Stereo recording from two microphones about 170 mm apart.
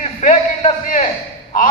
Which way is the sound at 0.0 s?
45° left (ahead or behind).